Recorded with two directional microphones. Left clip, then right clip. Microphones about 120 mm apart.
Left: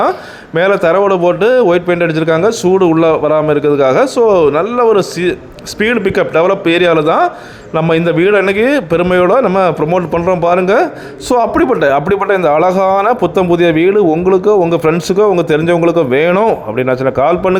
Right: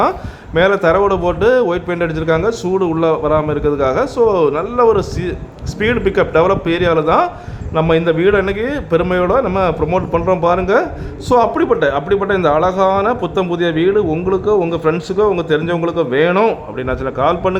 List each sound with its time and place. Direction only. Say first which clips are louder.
0.5 s a man's voice: left 2 dB; 30° left (ahead or behind); by 16.4 s 45° left (ahead or behind)
16.7 s a man's voice: left 7 dB; 35° left (ahead or behind)